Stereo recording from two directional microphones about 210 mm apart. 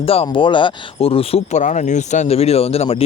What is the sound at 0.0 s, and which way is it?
Speech, 25° left (ahead or behind).